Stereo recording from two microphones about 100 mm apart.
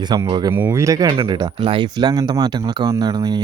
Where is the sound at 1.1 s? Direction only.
50° right (ahead or behind).